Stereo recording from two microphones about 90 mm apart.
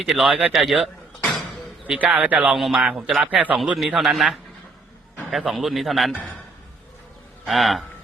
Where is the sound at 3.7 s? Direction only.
5° right (ahead or behind).